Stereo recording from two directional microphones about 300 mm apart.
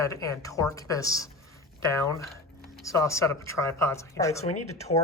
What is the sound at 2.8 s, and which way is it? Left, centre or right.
A woman's voice, centre.